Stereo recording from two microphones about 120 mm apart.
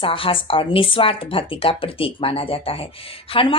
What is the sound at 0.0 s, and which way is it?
A woman's voice, 50° left (ahead or behind).